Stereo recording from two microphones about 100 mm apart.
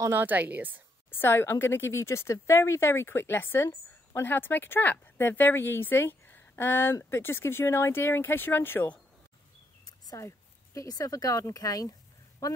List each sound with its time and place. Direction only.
0.1 s a woman's voice: 20° right (ahead or behind)
1.1 s a woman's voice: 20° left (ahead or behind)
9.8 s a sound: 40° left (ahead or behind)
10.2 s speech: 35° left (ahead or behind)